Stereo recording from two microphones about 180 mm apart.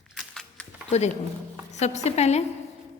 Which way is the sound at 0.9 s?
35° left (ahead or behind).